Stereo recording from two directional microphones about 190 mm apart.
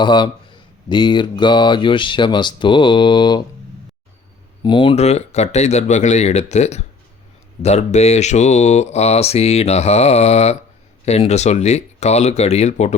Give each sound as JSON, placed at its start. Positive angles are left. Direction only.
{"t": 0.0, "sound": "speech", "side_deg": 25}
{"t": 4.6, "sound": "speech", "side_deg": 25}